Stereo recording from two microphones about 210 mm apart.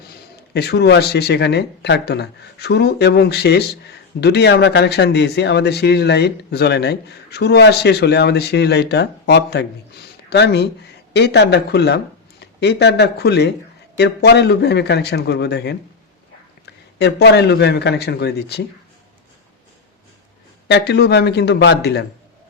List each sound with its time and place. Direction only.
0.5 s speech: 50° left (ahead or behind)
17.0 s speech: 50° left (ahead or behind)
20.7 s speech: 50° left (ahead or behind)